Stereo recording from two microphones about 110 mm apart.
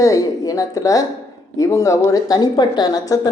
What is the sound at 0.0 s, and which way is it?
A woman's voice, 30° left (ahead or behind).